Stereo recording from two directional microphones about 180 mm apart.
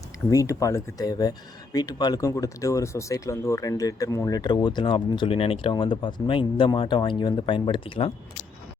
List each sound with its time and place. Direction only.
0.3 s speech: 15° left (ahead or behind)